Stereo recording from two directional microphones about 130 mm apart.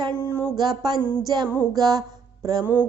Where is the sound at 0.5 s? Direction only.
30° right (ahead or behind).